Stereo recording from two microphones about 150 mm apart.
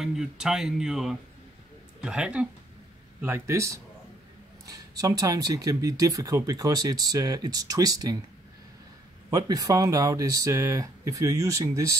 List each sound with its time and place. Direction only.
0.0 s speech: centre (ahead or behind); by 8.2 s 25° right (ahead or behind)
9.3 s speech: 25° right (ahead or behind)